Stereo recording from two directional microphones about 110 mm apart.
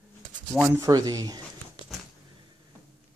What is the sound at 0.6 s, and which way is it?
Speech, 30° right (ahead or behind).